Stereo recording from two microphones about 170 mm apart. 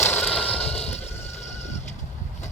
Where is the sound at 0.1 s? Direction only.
10° left (ahead or behind).